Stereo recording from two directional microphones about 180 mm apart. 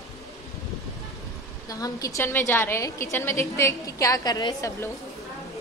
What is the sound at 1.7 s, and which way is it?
A woman's voice, 20° left (ahead or behind).